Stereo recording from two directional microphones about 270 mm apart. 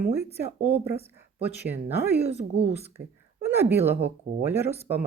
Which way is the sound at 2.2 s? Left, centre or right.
Right.